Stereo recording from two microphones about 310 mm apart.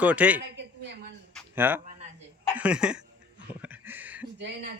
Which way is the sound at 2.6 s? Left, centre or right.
Centre.